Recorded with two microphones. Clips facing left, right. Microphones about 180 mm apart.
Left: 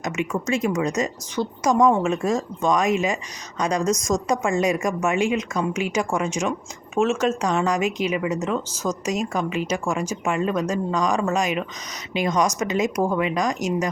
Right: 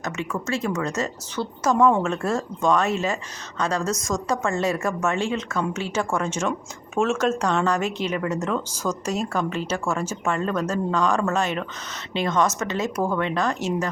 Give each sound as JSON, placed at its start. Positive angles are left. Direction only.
{"t": 0.0, "sound": "speech", "side_deg": 15}